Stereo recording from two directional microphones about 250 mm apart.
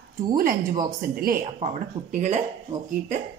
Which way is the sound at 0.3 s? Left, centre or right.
Right.